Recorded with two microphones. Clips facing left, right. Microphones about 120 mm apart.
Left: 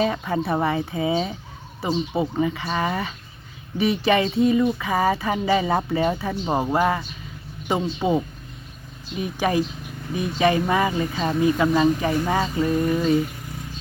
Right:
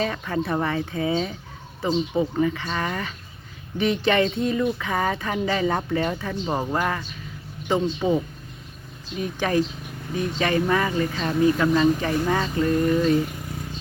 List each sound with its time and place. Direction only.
0.0 s speech: 15° left (ahead or behind)
9.2 s speech: 10° left (ahead or behind)